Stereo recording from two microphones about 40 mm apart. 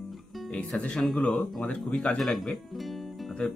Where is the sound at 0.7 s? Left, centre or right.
Left.